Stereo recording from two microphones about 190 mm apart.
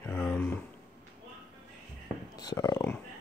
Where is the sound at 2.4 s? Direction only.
20° left (ahead or behind).